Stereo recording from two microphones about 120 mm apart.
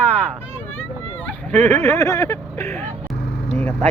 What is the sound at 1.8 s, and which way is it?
Speech, 25° left (ahead or behind).